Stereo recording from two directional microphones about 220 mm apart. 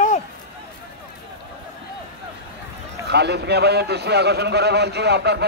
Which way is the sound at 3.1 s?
50° right (ahead or behind).